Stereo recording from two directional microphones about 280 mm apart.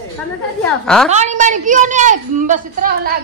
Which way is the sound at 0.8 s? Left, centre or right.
Centre.